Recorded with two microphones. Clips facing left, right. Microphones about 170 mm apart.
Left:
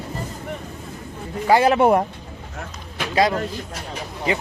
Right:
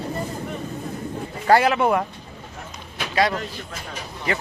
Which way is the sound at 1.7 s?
40° left (ahead or behind).